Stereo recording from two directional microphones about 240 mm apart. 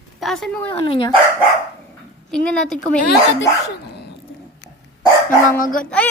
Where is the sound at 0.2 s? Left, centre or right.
Centre.